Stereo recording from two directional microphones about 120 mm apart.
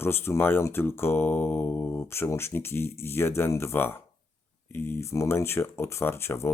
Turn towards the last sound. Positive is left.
turn(degrees=20)  # may be behind; listen again after turning